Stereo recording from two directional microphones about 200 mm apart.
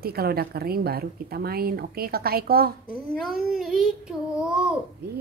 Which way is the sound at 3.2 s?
Centre (ahead or behind).